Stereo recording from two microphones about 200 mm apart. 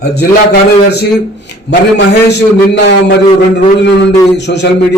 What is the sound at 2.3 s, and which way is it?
Speech, 60° left (ahead or behind).